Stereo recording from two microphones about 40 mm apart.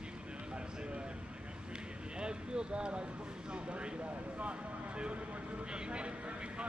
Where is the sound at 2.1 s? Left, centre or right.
Right.